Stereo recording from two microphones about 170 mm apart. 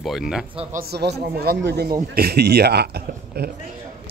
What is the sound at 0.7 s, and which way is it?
A man's voice, 65° right (ahead or behind).